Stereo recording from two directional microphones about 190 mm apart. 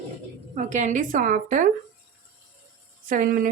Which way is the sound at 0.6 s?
40° right (ahead or behind).